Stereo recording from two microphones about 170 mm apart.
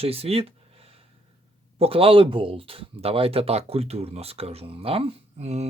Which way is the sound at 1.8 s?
35° right (ahead or behind).